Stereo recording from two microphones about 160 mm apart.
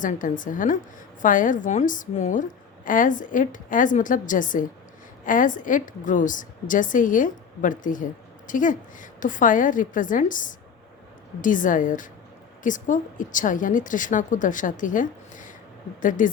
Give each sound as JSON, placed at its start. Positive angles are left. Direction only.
{"t": 0.0, "sound": "a woman's voice", "side_deg": 55}